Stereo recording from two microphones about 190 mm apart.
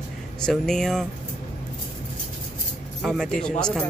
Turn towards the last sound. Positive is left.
turn(degrees=5)  # may be behind; listen again after turning